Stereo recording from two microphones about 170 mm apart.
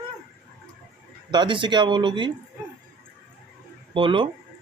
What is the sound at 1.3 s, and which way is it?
Speech, 25° right (ahead or behind).